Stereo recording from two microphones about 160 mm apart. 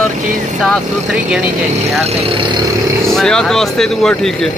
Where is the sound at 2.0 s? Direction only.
40° right (ahead or behind).